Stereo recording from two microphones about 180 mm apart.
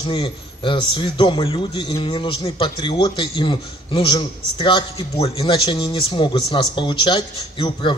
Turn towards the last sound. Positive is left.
turn(degrees=30)  # may be behind; listen again after turning